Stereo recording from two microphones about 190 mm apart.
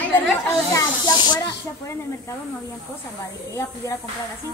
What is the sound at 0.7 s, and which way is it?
Speech, 20° left (ahead or behind).